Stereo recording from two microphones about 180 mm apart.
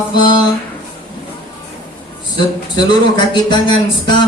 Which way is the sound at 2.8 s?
25° left (ahead or behind).